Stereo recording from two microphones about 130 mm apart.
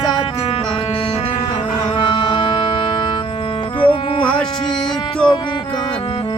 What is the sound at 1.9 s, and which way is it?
Music, 40° left (ahead or behind).